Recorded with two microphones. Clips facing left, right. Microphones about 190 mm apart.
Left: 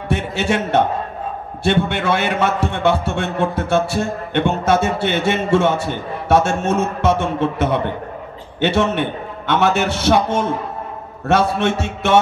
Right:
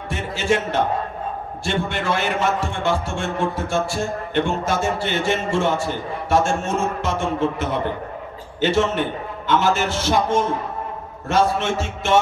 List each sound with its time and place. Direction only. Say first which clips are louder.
0.1 s a man's voice: left 2 dB; 65° left (ahead or behind)